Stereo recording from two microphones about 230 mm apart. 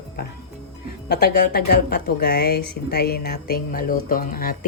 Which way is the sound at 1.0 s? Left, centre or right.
Left.